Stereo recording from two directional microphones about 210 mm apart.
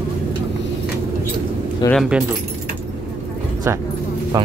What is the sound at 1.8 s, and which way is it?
Speech, 20° left (ahead or behind).